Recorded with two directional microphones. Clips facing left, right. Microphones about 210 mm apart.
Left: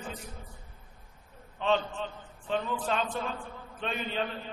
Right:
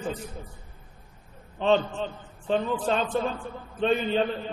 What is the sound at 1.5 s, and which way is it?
A man's voice, 30° right (ahead or behind).